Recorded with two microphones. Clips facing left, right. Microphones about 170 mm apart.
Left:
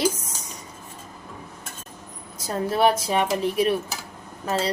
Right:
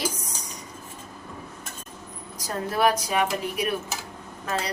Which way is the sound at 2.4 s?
25° left (ahead or behind).